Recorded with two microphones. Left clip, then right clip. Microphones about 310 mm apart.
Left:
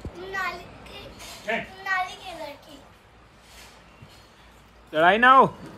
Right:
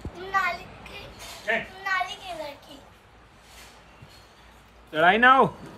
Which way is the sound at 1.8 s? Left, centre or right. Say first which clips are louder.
Left 2 dB; centre.